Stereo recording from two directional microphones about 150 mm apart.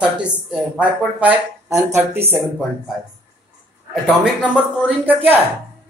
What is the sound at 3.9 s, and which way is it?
A man's voice, 5° right (ahead or behind).